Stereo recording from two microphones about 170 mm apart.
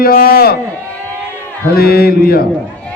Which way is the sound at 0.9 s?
10° left (ahead or behind).